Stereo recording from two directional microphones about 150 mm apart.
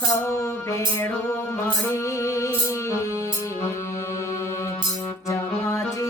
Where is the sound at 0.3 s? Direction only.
20° left (ahead or behind).